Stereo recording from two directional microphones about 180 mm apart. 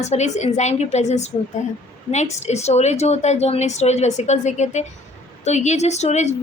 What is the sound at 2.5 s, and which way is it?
A woman's voice, 35° left (ahead or behind).